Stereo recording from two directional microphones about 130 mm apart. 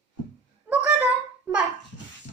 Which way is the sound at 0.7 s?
10° right (ahead or behind).